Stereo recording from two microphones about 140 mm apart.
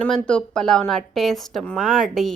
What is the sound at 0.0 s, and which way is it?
A woman's voice, 10° left (ahead or behind).